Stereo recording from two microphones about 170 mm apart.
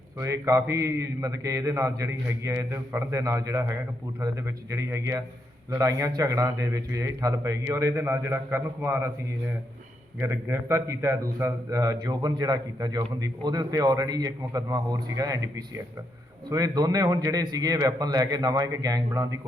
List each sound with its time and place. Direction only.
0.2 s a man's voice: 15° right (ahead or behind)
10.2 s a man's voice: 15° right (ahead or behind)